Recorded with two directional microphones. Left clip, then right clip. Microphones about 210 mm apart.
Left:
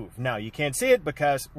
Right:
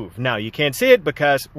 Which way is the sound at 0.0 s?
30° right (ahead or behind).